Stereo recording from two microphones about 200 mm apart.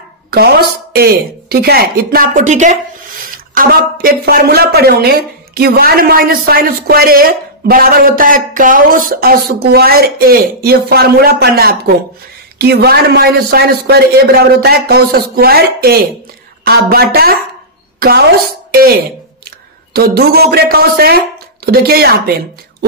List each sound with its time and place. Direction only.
0.3 s speech: 50° right (ahead or behind)
3.5 s speech: 45° right (ahead or behind)
19.9 s speech: 50° right (ahead or behind)